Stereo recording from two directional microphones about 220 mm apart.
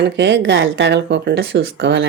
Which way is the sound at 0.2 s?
55° right (ahead or behind).